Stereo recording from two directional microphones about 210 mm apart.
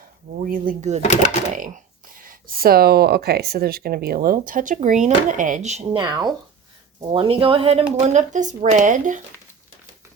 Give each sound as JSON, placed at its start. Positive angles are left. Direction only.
{"t": 0.4, "sound": "speech", "side_deg": -40}